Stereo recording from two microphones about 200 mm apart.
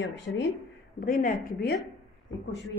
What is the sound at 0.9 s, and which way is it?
Speech, 45° left (ahead or behind).